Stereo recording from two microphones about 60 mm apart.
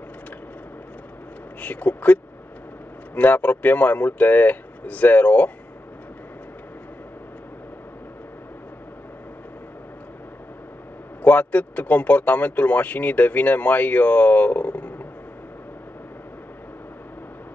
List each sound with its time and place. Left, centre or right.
1.6 s a man's voice: left
3.2 s a man's voice: left
11.2 s a man's voice: left